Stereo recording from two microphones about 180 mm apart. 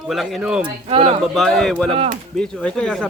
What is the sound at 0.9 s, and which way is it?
Speech, 30° right (ahead or behind).